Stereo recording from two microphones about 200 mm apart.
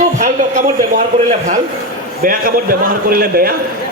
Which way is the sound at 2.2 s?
45° right (ahead or behind).